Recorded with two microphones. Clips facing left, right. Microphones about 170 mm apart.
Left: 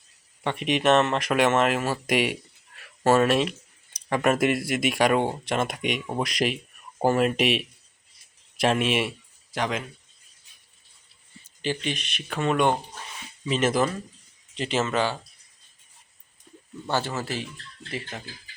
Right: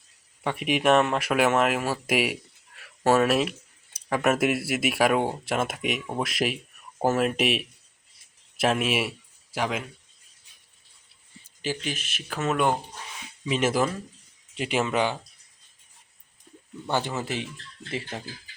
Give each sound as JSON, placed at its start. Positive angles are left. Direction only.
{"t": 0.4, "sound": "speech", "side_deg": -5}
{"t": 11.6, "sound": "speech", "side_deg": -5}
{"t": 16.9, "sound": "speech", "side_deg": -15}
{"t": 18.1, "sound": "speech", "side_deg": -30}